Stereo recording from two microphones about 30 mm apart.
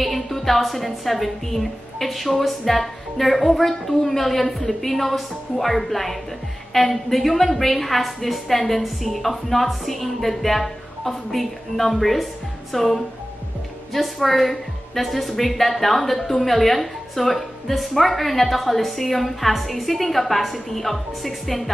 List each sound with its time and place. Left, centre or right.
0.0 s a woman's voice: centre